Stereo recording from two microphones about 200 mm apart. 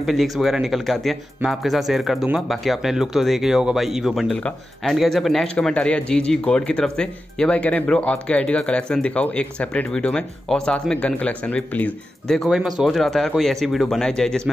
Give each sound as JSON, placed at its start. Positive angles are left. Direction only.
{"t": 0.0, "sound": "speech", "side_deg": 0}